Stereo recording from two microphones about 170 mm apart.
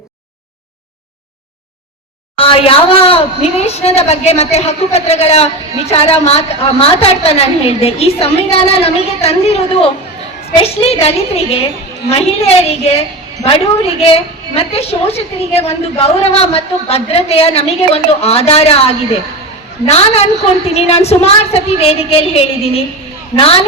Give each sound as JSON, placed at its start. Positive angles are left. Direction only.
{"t": 2.4, "sound": "a woman's voice", "side_deg": 30}